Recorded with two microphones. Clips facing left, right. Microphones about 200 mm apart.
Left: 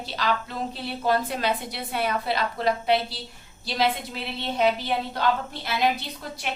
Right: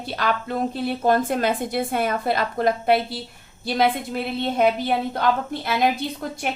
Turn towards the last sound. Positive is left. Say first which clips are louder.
# right 8 dB
turn(degrees=-50)  # may be behind; listen again after turning